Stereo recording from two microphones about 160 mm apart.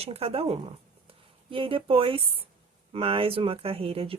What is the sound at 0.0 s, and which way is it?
Speech, 35° right (ahead or behind).